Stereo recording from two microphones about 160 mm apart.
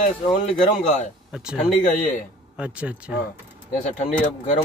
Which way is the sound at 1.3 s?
5° right (ahead or behind).